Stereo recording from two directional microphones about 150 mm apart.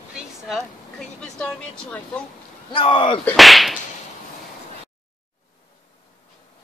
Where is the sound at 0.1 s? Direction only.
Centre (ahead or behind).